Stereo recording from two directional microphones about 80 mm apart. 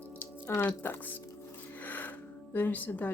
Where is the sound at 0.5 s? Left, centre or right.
Left.